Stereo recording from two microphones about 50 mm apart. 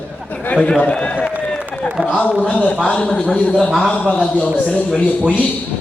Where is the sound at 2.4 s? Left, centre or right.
Left.